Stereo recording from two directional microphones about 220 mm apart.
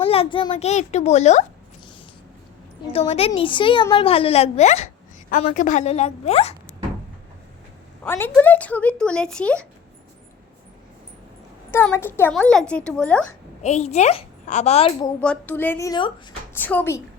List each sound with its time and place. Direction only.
0.0 s a woman's voice: 25° left (ahead or behind)
2.9 s a woman's voice: 25° left (ahead or behind)
8.0 s speech: 10° left (ahead or behind)
11.7 s speech: 10° left (ahead or behind)
13.6 s a woman's voice: 30° left (ahead or behind)
15.2 s a woman's voice: 5° left (ahead or behind)
16.6 s a woman's voice: 10° left (ahead or behind)